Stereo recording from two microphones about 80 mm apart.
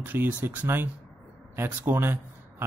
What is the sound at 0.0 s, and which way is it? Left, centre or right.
Speech, right.